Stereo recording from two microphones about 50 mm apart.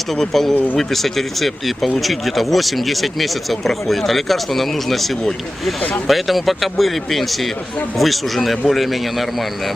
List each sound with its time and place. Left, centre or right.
0.2 s speech: centre